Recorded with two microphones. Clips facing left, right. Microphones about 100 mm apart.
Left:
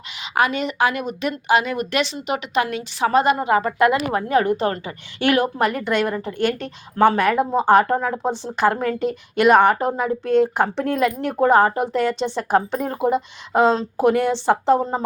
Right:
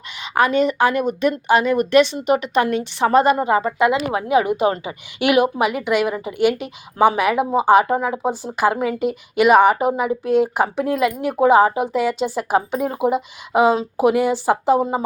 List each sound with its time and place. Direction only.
0.3 s a woman's voice: 35° right (ahead or behind)
1.0 s a woman's voice: 50° right (ahead or behind)
3.5 s a woman's voice: 20° right (ahead or behind)